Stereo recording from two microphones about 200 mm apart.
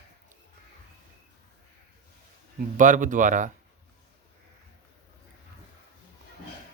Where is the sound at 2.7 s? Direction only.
40° right (ahead or behind).